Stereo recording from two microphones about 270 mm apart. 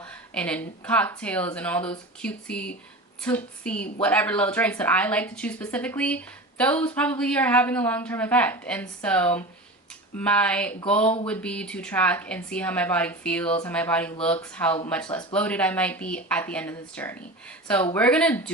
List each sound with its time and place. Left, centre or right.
0.3 s a woman's voice: centre
15.0 s speech: centre
15.3 s a woman's voice: centre